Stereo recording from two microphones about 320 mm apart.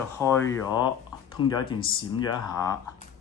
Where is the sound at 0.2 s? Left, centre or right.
Centre.